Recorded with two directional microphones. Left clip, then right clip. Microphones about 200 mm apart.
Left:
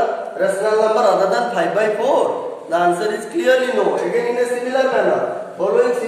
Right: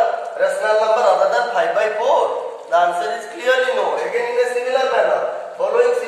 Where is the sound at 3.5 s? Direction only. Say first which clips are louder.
Left 1 dB; 20° left (ahead or behind).